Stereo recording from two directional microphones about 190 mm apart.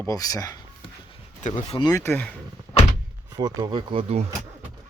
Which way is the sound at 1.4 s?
30° left (ahead or behind).